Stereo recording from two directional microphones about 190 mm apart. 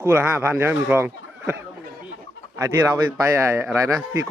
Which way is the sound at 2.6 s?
15° right (ahead or behind).